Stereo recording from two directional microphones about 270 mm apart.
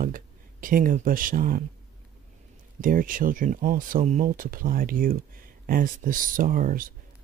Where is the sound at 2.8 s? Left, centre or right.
Right.